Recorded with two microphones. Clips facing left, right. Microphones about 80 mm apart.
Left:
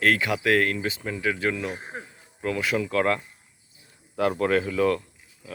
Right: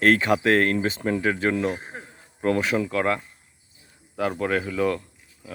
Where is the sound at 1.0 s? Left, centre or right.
Right.